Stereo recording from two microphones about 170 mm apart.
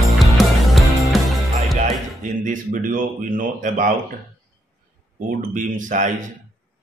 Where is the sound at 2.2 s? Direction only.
50° right (ahead or behind).